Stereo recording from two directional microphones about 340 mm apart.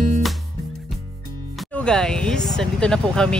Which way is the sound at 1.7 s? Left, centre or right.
Centre.